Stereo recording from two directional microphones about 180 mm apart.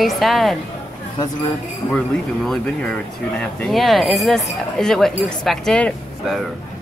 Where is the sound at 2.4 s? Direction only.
5° left (ahead or behind).